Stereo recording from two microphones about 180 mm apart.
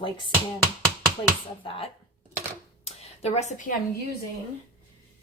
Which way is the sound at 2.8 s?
35° left (ahead or behind).